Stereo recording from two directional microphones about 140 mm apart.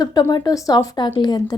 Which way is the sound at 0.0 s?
30° left (ahead or behind).